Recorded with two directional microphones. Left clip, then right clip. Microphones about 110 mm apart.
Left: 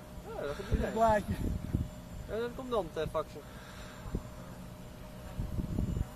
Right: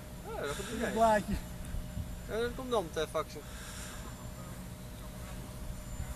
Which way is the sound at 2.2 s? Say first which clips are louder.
Right 2 dB; 75° left (ahead or behind).